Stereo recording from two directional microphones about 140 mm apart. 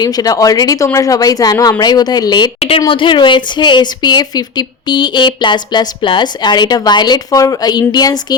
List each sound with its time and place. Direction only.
0.0 s speech: 25° left (ahead or behind)
2.6 s a woman's voice: 45° left (ahead or behind)